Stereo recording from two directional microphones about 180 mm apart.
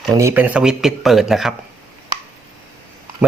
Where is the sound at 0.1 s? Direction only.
15° right (ahead or behind).